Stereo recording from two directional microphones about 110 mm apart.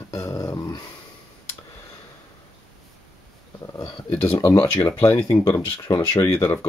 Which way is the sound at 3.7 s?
25° left (ahead or behind).